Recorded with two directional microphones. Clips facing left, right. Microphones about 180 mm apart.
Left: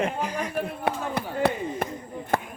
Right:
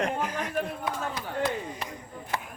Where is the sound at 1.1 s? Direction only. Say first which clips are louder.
Left 5 dB; 60° left (ahead or behind).